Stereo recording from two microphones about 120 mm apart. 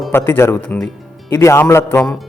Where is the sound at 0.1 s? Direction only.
20° left (ahead or behind).